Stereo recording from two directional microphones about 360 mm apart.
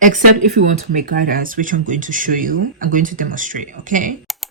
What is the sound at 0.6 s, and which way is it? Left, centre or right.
Speech, right.